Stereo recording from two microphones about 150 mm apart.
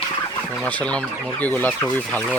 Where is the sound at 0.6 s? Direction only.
10° left (ahead or behind).